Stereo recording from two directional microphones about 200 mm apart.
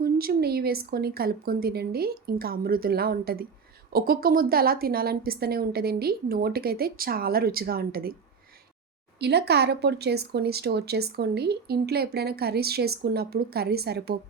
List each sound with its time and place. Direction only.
0.0 s a woman's voice: 50° right (ahead or behind)
9.2 s a woman's voice: 55° right (ahead or behind)